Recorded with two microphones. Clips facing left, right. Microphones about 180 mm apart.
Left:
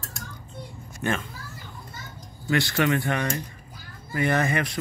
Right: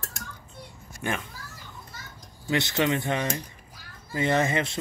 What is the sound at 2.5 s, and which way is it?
Speech, 20° right (ahead or behind).